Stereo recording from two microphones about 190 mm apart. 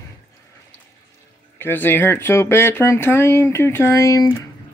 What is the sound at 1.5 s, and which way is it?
Speech, 10° left (ahead or behind).